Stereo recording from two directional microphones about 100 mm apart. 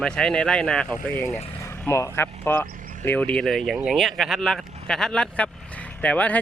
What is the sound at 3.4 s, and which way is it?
Speech, centre (ahead or behind).